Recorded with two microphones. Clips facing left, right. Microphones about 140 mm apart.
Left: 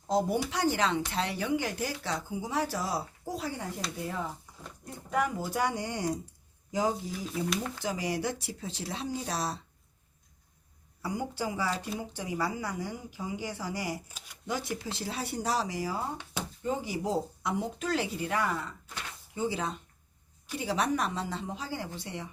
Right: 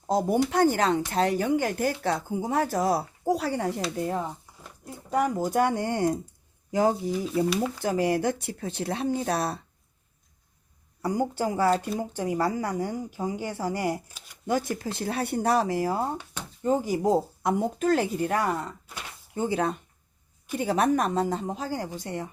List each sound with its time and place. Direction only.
0.1 s speech: 50° right (ahead or behind); by 3.7 s 70° right (ahead or behind)
5.1 s speech: 40° right (ahead or behind); by 6.9 s 60° right (ahead or behind)
7.4 s speech: 5° right (ahead or behind)
7.8 s speech: 55° right (ahead or behind)
11.0 s speech: 45° right (ahead or behind)
16.6 s speech: 45° right (ahead or behind)
19.3 s speech: 55° right (ahead or behind)